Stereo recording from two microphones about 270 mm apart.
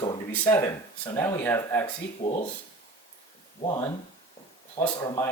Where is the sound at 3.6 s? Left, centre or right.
Centre.